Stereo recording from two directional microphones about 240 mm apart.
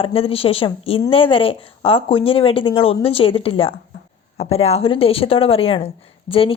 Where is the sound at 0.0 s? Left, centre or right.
Left.